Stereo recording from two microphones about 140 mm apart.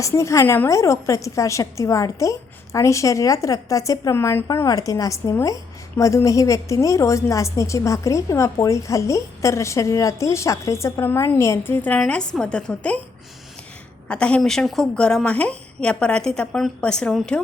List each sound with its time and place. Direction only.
0.0 s a woman's voice: 20° left (ahead or behind)
14.1 s a woman's voice: 5° left (ahead or behind)